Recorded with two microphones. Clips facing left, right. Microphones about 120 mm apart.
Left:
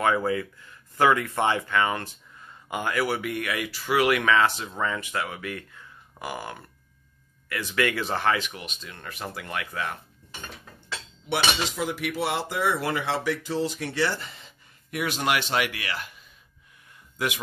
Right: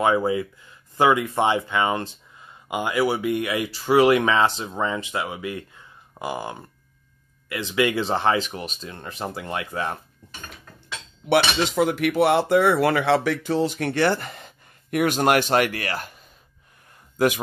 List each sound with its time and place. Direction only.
0.0 s speech: 20° right (ahead or behind)
10.2 s dishes: 50° right (ahead or behind)
11.2 s cutlery: 65° right (ahead or behind); by 16.3 s 45° right (ahead or behind)